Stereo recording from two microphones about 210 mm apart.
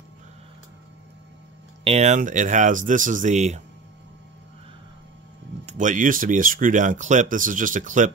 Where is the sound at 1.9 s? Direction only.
30° right (ahead or behind).